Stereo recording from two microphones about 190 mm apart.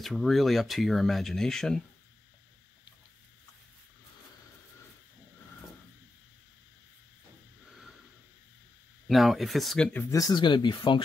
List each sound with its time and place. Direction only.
0.0 s speech: centre (ahead or behind)
9.0 s speech: centre (ahead or behind)
10.1 s speech: 20° left (ahead or behind)